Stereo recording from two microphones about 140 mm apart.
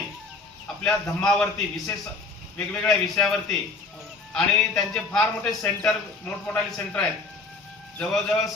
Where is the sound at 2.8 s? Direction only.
5° left (ahead or behind).